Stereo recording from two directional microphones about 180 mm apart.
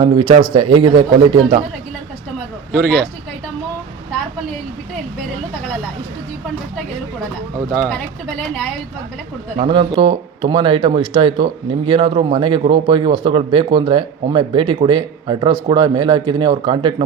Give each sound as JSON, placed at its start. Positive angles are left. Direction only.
{"t": 0.0, "sound": "speech", "side_deg": -25}
{"t": 2.7, "sound": "speech", "side_deg": 5}
{"t": 7.7, "sound": "speech", "side_deg": 5}
{"t": 9.6, "sound": "speech", "side_deg": -30}